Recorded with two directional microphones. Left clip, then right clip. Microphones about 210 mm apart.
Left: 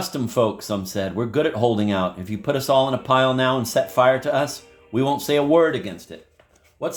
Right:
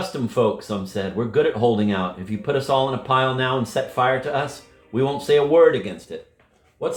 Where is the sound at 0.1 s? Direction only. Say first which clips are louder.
Even; 50° left (ahead or behind).